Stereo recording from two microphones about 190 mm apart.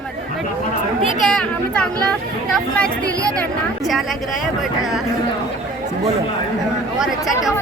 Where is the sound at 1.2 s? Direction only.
5° left (ahead or behind).